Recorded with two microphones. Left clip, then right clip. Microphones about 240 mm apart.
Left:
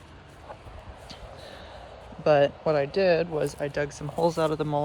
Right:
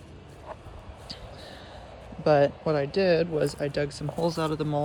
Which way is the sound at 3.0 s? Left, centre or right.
Centre.